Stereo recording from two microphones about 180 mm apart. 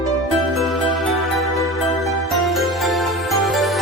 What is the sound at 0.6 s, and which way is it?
Music, centre (ahead or behind).